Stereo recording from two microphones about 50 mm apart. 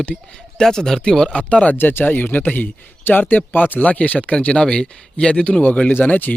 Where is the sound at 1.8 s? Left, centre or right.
Left.